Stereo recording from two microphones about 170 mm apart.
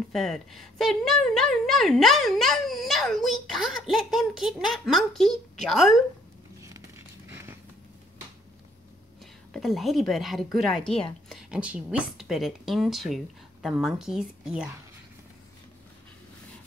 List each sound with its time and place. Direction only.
0.1 s speech: centre (ahead or behind)
7.2 s a sound: 15° right (ahead or behind)
9.2 s speech: centre (ahead or behind)